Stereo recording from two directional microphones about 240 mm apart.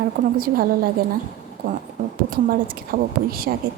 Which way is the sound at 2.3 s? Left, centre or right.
Right.